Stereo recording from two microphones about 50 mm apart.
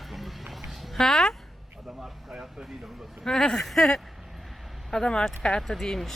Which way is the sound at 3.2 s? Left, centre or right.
Centre.